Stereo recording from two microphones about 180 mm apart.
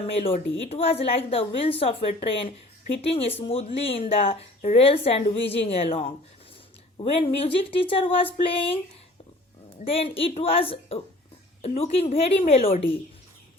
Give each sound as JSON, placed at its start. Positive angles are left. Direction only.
{"t": 0.2, "sound": "speech", "side_deg": 35}
{"t": 9.8, "sound": "speech", "side_deg": 30}